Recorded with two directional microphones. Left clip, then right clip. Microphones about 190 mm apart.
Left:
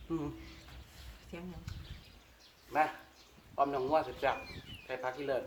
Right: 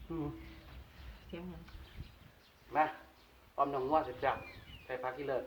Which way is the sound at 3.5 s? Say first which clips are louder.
Left 1 dB; 20° left (ahead or behind).